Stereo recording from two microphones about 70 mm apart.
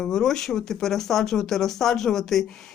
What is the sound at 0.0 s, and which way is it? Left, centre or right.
Speech, centre.